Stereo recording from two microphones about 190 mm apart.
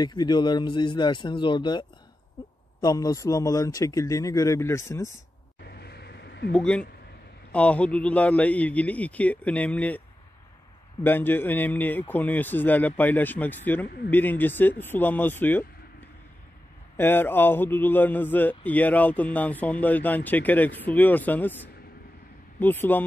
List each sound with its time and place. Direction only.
0.0 s a woman's voice: 20° left (ahead or behind)
5.6 s a sound: 60° left (ahead or behind)
6.5 s a man's voice: 5° left (ahead or behind)
11.1 s a man's voice: 10° left (ahead or behind)
13.8 s speech: 55° left (ahead or behind)
14.1 s a man's voice: 10° left (ahead or behind)
16.9 s a man's voice: 10° left (ahead or behind)